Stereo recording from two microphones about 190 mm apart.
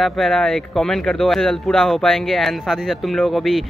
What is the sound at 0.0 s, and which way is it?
Speech, centre (ahead or behind).